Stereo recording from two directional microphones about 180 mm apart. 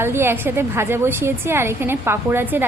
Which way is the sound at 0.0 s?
15° right (ahead or behind).